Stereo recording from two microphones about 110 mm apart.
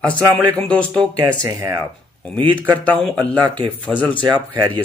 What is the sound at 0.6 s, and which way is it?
Speech, 10° left (ahead or behind).